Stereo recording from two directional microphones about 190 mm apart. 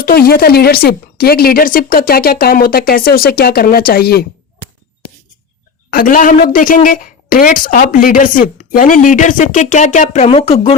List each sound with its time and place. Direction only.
0.0 s speech: 50° left (ahead or behind)
5.9 s speech: 45° left (ahead or behind); by 10.8 s 30° left (ahead or behind)